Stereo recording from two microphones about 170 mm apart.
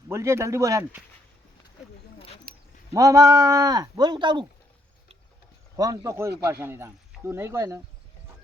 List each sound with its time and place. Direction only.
0.1 s speech: 15° right (ahead or behind)
2.1 s a sound: 35° left (ahead or behind)
2.9 s speech: 20° right (ahead or behind)
5.7 s speech: 20° right (ahead or behind)